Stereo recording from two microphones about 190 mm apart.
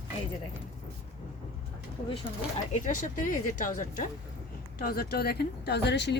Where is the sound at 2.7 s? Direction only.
45° left (ahead or behind); by 6.2 s 65° left (ahead or behind).